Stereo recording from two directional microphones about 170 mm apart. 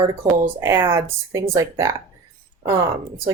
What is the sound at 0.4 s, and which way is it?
Speech, 15° right (ahead or behind).